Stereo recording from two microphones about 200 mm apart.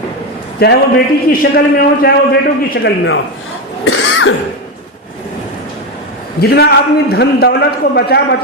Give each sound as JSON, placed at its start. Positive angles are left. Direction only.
{"t": 0.6, "sound": "a man's voice", "side_deg": 55}
{"t": 3.8, "sound": "cough", "side_deg": 90}
{"t": 6.4, "sound": "a man's voice", "side_deg": 55}